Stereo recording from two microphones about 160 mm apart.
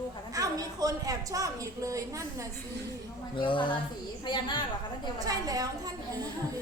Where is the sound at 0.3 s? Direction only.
25° right (ahead or behind).